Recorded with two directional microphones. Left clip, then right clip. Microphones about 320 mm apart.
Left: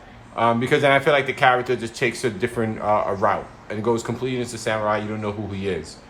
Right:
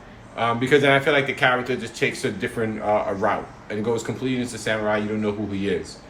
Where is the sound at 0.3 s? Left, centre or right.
Centre.